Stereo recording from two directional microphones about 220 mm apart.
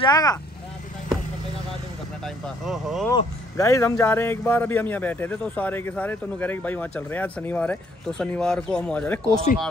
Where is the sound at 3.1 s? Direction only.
15° left (ahead or behind).